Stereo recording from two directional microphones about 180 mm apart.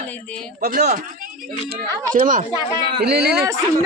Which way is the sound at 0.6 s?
50° right (ahead or behind).